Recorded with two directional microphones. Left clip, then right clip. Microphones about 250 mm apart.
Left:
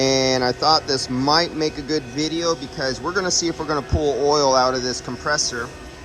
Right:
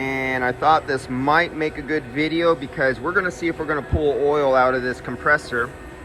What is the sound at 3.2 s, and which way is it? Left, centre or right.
Speech, centre.